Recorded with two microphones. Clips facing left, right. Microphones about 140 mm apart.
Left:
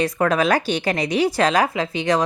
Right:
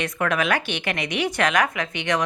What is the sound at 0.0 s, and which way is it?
A woman's voice, 35° left (ahead or behind).